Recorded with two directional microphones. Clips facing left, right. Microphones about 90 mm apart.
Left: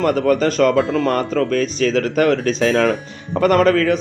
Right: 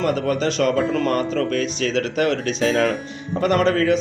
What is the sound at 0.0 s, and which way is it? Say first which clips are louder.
Speech: left 5 dB; 45° left (ahead or behind).